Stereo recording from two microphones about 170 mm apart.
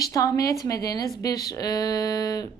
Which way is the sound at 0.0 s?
20° left (ahead or behind).